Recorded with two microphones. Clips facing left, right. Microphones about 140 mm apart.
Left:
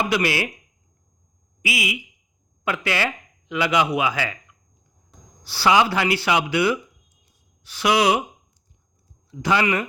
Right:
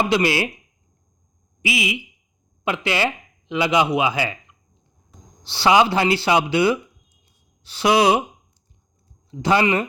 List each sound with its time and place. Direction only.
0.0 s speech: 25° right (ahead or behind)
1.6 s speech: 25° right (ahead or behind)
9.3 s speech: 30° right (ahead or behind)